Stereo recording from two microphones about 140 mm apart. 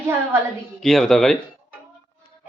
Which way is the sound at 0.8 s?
5° left (ahead or behind).